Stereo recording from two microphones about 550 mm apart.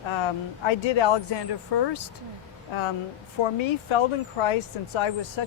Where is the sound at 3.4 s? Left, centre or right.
Left.